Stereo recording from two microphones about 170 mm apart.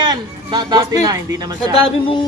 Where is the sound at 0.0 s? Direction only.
25° right (ahead or behind).